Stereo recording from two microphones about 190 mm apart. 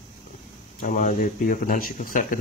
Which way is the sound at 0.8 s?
40° left (ahead or behind).